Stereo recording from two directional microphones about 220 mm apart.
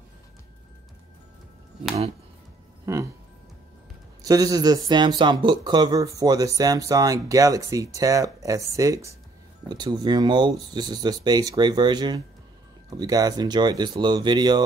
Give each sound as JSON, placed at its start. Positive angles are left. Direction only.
{"t": 2.8, "sound": "speech", "side_deg": -15}
{"t": 4.2, "sound": "speech", "side_deg": -15}